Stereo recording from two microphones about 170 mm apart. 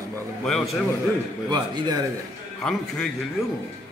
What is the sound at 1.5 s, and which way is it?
Speech, 25° right (ahead or behind).